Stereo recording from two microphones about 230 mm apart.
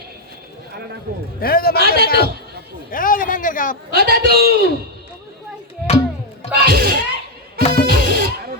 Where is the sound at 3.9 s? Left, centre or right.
Right.